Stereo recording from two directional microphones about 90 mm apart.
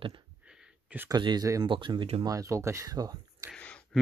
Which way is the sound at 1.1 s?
50° right (ahead or behind).